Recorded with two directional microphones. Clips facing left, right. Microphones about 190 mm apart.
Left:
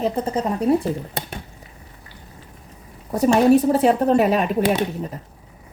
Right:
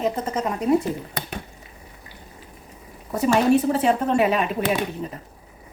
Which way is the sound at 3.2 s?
40° left (ahead or behind).